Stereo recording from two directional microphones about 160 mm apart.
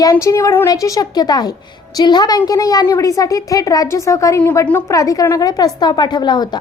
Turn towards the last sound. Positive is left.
turn(degrees=25)  # may be behind; listen again after turning